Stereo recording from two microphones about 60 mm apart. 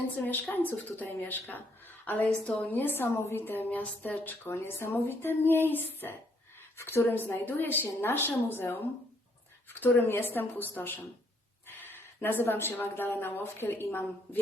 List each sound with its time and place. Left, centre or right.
0.3 s a woman's voice: left